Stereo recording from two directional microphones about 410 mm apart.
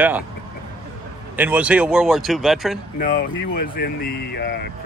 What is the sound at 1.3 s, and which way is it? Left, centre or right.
Speech, centre.